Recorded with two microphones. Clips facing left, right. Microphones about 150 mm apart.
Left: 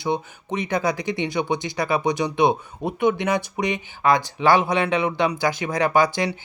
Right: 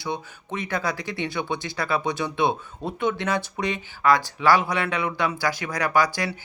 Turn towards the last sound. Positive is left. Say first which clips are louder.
# left 3 dB
turn(degrees=20)  # may be behind; listen again after turning